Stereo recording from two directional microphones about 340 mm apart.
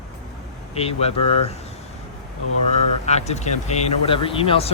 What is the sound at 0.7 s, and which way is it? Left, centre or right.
Speech, centre.